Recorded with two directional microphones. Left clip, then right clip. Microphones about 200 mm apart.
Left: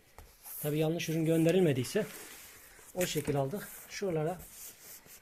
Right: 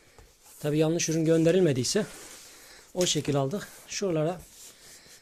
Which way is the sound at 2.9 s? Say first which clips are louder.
Right 6 dB; 45° right (ahead or behind).